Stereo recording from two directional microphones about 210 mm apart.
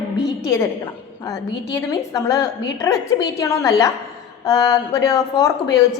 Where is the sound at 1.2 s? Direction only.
15° left (ahead or behind).